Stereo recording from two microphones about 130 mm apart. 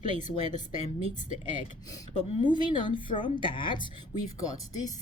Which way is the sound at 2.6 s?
35° left (ahead or behind).